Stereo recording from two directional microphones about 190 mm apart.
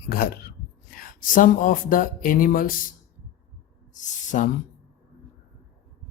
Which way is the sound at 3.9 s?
40° left (ahead or behind).